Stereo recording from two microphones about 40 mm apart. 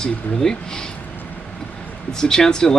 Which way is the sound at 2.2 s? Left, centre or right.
Centre.